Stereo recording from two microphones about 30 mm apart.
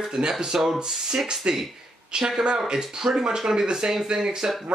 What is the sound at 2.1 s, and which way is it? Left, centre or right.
Speech, centre.